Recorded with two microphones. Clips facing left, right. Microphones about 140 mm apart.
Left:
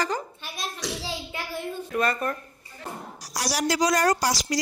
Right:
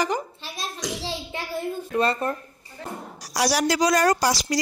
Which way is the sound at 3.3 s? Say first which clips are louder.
Right 4 dB; 75° right (ahead or behind).